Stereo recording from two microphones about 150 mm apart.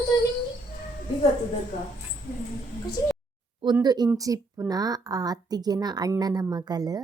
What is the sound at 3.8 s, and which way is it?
Speech, 30° right (ahead or behind).